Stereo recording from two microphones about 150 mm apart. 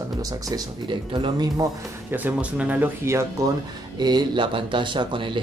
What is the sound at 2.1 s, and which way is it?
Speech, 10° right (ahead or behind).